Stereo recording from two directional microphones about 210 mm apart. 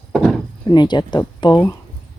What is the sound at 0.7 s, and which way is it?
Speech, 20° left (ahead or behind).